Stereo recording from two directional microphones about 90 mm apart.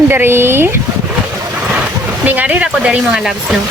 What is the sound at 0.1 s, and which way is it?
Speech, 25° right (ahead or behind).